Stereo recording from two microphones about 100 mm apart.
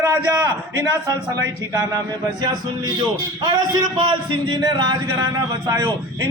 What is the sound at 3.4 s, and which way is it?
A man's voice, 45° right (ahead or behind).